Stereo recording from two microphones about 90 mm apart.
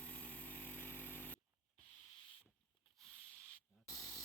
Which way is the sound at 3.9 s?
35° left (ahead or behind).